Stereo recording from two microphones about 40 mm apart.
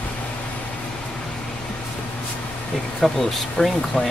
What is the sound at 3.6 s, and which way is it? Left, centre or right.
Speech, left.